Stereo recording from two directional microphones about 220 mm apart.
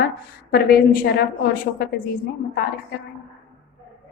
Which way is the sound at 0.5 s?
45° left (ahead or behind).